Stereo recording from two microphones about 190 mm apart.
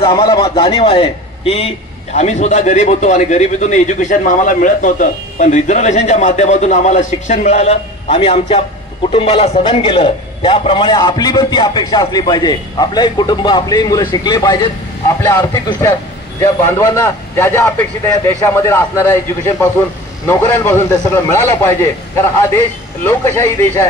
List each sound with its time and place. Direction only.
0.0 s a man's voice: 25° left (ahead or behind)
16.3 s a man's voice: 15° left (ahead or behind)